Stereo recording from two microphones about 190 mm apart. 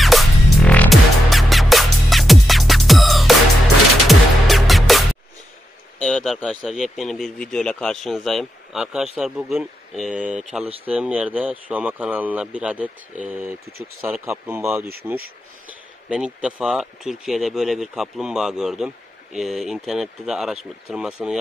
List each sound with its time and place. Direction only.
0.0 s music: centre (ahead or behind)
5.9 s speech: 5° left (ahead or behind)
16.1 s speech: 5° right (ahead or behind)